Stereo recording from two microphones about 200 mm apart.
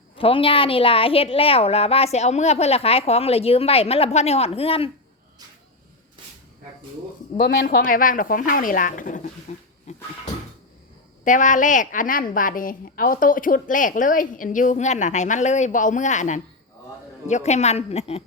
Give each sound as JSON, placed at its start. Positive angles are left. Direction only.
{"t": 0.2, "sound": "a woman's voice", "side_deg": 25}
{"t": 7.3, "sound": "speech", "side_deg": 55}
{"t": 9.9, "sound": "cupboard open or close", "side_deg": 35}
{"t": 11.2, "sound": "a woman's voice", "side_deg": 40}